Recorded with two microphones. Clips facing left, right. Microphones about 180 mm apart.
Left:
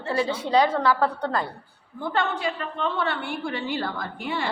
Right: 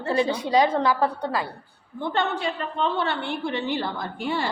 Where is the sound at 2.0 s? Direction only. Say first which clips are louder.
Right 1 dB; 25° right (ahead or behind).